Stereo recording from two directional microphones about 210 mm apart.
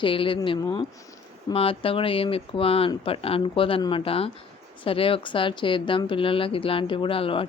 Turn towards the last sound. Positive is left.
turn(degrees=25)  # may be behind; listen again after turning